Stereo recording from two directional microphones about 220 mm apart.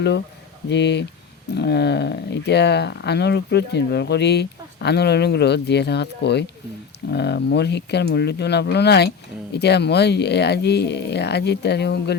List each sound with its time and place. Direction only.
0.7 s speech: 50° left (ahead or behind)